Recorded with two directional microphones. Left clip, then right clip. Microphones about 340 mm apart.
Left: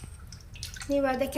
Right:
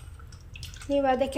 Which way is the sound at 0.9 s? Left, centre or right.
Centre.